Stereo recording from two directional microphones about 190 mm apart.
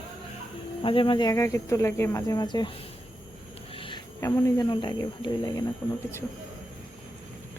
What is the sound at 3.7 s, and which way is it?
Speech, 25° left (ahead or behind).